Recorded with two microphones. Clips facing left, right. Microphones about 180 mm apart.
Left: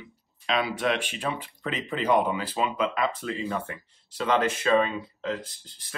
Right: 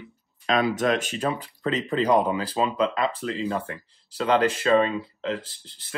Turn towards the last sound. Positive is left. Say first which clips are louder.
# right 2 dB
turn(degrees=-25)  # may be behind; listen again after turning